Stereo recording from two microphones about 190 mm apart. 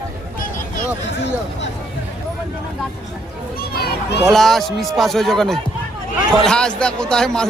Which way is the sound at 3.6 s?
55° left (ahead or behind).